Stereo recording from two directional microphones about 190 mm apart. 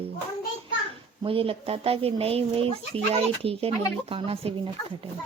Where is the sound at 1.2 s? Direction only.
30° right (ahead or behind).